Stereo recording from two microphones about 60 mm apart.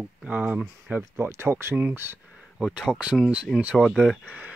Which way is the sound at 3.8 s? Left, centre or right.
Centre.